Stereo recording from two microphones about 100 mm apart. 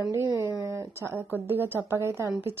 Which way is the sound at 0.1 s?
30° right (ahead or behind).